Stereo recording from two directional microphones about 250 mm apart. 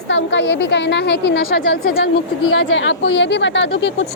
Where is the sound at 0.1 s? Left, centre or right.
Left.